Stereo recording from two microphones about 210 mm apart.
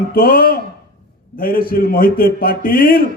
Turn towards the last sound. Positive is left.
turn(degrees=45)  # may be behind; listen again after turning